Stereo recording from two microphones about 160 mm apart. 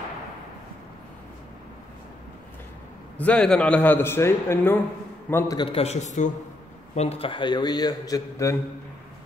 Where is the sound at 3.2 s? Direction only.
5° left (ahead or behind).